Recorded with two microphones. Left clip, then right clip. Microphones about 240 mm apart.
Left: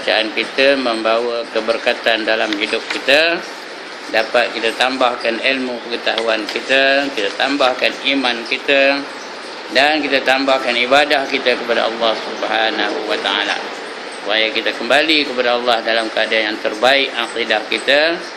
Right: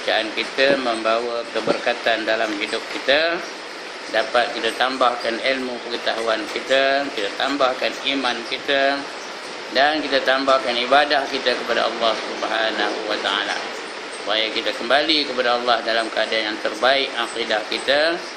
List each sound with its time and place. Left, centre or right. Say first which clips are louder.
0.1 s speech: left 5 dB; centre